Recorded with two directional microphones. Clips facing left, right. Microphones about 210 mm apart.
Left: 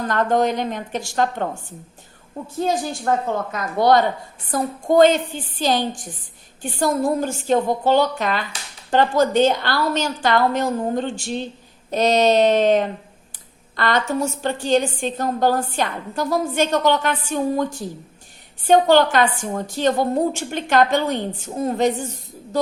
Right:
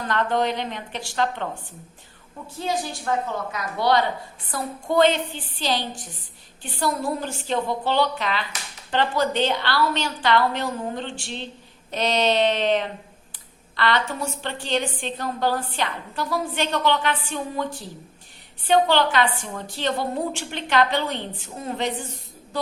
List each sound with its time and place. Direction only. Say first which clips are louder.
0.0 s a woman's voice: left 4 dB; 45° left (ahead or behind)
2.6 s a woman's voice: left 5 dB; 45° left (ahead or behind)